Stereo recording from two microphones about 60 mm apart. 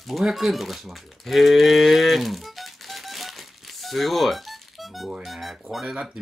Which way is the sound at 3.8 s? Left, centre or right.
Centre.